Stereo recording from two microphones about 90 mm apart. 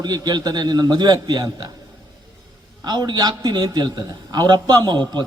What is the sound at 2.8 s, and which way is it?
A man's voice, 50° right (ahead or behind).